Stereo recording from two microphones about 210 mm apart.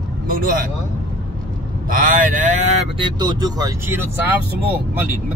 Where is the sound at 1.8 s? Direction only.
40° right (ahead or behind).